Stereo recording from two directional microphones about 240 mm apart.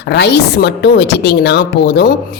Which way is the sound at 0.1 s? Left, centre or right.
Left.